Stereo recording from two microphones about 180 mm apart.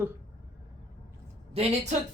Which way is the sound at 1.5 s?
35° right (ahead or behind).